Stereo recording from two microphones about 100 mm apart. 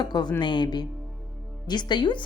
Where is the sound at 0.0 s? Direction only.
45° left (ahead or behind).